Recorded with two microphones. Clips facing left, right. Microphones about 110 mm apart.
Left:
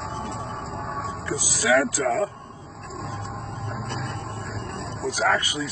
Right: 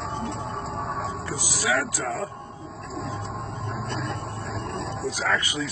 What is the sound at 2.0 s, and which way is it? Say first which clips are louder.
Speech: left 6 dB; 90° left.